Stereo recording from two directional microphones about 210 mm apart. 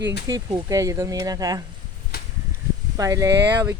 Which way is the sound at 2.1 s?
45° left (ahead or behind).